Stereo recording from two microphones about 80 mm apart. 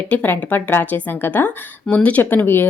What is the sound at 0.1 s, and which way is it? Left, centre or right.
Speech, centre.